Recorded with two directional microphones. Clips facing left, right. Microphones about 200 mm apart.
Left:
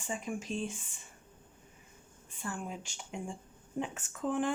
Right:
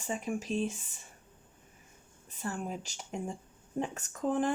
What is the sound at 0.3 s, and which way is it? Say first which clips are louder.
Speech: right 4 dB; 35° right (ahead or behind).